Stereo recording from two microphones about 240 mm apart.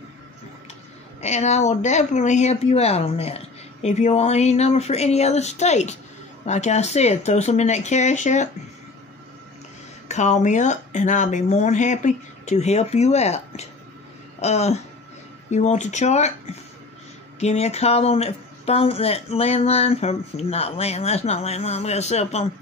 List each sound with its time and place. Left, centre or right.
1.2 s speech: left
10.0 s speech: left